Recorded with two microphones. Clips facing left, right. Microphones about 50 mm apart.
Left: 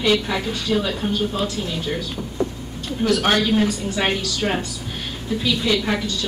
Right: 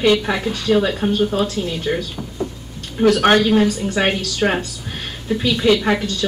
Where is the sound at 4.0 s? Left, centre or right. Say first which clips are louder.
Right 4 dB; right.